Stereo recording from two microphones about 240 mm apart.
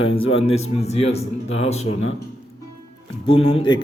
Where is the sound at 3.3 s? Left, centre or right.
Left.